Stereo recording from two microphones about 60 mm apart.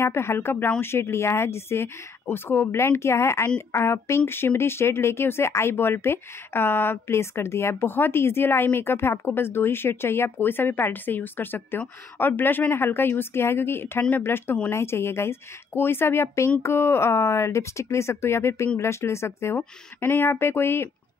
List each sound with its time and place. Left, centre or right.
0.0 s speech: left